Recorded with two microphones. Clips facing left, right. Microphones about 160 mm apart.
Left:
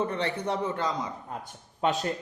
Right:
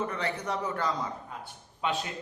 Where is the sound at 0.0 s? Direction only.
30° left (ahead or behind).